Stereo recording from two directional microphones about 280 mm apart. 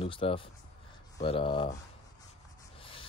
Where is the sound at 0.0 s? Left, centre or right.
Centre.